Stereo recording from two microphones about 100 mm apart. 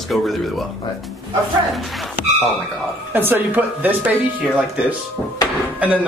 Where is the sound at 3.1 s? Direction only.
20° right (ahead or behind).